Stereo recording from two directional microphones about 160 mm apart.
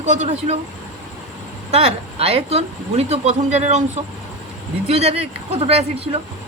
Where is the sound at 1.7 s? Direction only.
40° right (ahead or behind).